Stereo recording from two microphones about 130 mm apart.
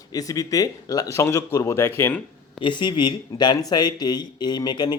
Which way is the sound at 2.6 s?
35° left (ahead or behind).